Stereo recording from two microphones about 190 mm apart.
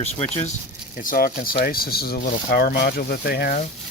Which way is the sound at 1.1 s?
50° left (ahead or behind).